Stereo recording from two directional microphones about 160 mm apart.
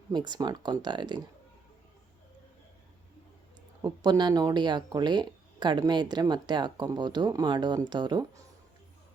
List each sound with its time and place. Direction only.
0.1 s speech: 25° right (ahead or behind)
3.8 s speech: 25° right (ahead or behind)